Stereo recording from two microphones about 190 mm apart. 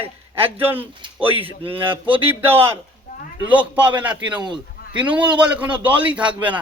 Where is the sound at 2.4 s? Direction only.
10° right (ahead or behind).